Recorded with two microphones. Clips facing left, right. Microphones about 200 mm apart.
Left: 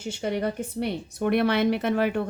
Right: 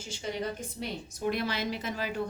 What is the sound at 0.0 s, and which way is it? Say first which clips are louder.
Speech: left 7 dB; 60° left (ahead or behind).